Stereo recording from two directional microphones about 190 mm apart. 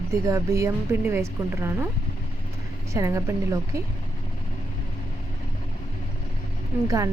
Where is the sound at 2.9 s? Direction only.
15° right (ahead or behind).